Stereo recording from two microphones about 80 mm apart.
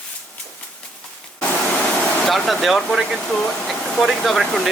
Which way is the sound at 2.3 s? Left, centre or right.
Centre.